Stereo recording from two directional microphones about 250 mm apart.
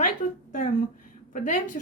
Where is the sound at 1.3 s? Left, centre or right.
Left.